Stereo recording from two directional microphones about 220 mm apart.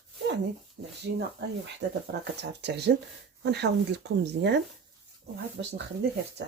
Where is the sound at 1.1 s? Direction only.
55° right (ahead or behind).